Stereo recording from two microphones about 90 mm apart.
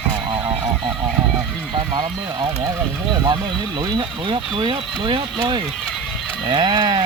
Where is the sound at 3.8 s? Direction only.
60° right (ahead or behind).